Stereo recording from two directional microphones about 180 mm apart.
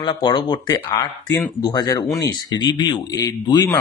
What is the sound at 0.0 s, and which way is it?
A man's voice, 25° left (ahead or behind).